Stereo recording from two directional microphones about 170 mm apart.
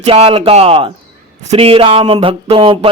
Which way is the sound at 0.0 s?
35° right (ahead or behind).